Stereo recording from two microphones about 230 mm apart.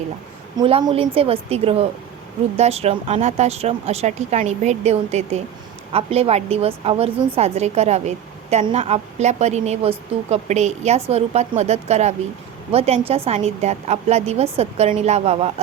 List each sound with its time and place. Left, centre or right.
0.5 s a woman's voice: right